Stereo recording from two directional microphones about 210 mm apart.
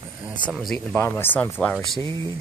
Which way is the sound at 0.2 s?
Centre (ahead or behind).